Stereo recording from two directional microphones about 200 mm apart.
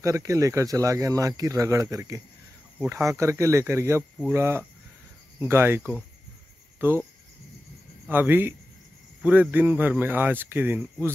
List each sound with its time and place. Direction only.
0.0 s speech: 15° right (ahead or behind)
8.1 s speech: 10° right (ahead or behind)